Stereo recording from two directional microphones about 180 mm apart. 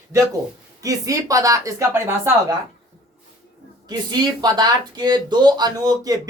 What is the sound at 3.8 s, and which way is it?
Speech, 20° right (ahead or behind).